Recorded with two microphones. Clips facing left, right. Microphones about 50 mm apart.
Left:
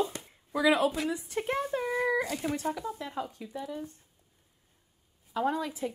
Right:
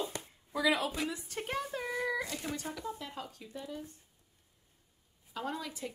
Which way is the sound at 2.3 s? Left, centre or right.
Centre.